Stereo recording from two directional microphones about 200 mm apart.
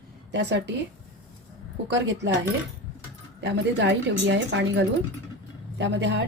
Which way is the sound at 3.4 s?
60° right (ahead or behind).